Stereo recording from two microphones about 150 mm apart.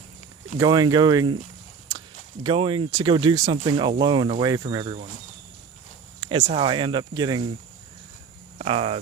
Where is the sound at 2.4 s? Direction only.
35° right (ahead or behind).